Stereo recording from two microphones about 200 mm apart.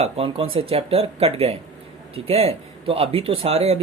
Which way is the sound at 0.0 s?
25° right (ahead or behind).